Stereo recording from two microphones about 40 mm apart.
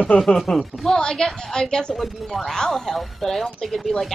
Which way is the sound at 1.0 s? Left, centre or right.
Centre.